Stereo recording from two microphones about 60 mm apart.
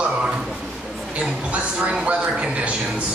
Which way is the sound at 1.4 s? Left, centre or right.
Right.